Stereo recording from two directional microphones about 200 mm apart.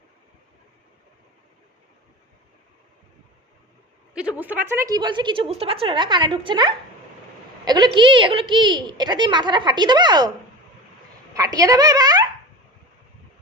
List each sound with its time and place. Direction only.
4.1 s a woman's voice: 5° right (ahead or behind); by 10.2 s 20° right (ahead or behind)
11.3 s speech: 15° right (ahead or behind)